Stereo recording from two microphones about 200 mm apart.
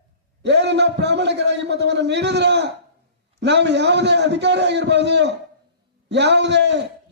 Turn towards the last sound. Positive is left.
turn(degrees=-60)  # may be behind; listen again after turning